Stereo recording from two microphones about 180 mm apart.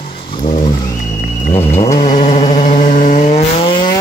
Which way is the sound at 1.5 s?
35° left (ahead or behind).